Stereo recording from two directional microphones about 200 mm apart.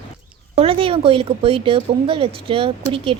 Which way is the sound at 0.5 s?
30° right (ahead or behind).